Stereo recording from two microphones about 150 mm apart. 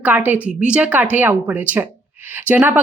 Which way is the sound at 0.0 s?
10° right (ahead or behind).